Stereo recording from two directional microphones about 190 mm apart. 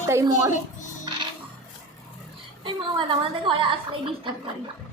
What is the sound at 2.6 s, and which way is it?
A woman's voice, 25° right (ahead or behind).